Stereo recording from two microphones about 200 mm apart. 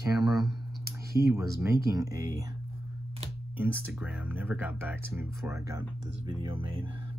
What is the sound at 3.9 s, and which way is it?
Speech, 10° right (ahead or behind).